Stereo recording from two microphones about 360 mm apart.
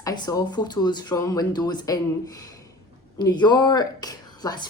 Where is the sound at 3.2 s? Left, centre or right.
Centre.